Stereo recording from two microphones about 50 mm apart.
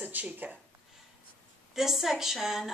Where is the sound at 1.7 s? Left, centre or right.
Centre.